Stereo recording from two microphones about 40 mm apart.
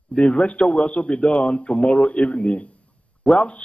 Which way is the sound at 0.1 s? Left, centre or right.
Left.